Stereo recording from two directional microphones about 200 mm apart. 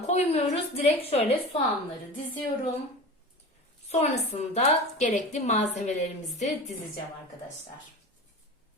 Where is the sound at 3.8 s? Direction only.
30° left (ahead or behind).